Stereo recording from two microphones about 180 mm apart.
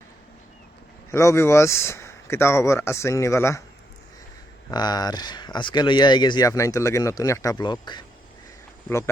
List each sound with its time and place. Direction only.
1.1 s speech: 15° left (ahead or behind)
4.7 s speech: 25° left (ahead or behind)